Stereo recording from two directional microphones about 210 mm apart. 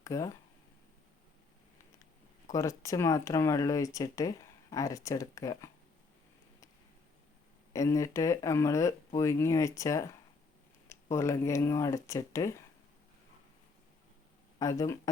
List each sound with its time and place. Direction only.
0.0 s speech: 15° left (ahead or behind)
2.5 s speech: 15° left (ahead or behind)
7.7 s speech: 15° left (ahead or behind)
14.6 s speech: 15° left (ahead or behind)